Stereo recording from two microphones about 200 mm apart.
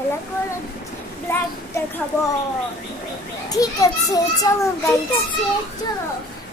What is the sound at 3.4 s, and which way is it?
A child's voice, 15° left (ahead or behind).